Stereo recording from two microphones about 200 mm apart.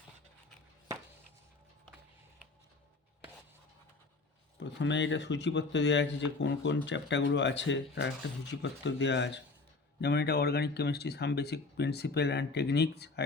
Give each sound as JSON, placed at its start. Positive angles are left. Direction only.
{"t": 4.6, "sound": "speech", "side_deg": 65}